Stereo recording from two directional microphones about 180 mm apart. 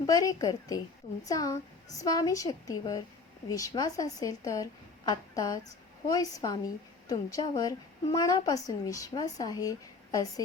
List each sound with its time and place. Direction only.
0.0 s a woman's voice: 20° left (ahead or behind)